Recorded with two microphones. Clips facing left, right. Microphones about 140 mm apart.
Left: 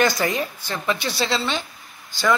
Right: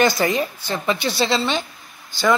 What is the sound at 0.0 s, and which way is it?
A woman's voice, 10° right (ahead or behind).